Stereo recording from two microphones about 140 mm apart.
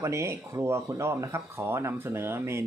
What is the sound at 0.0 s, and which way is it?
Speech, 20° right (ahead or behind).